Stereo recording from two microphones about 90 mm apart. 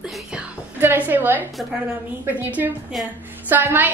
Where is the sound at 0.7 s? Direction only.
20° right (ahead or behind).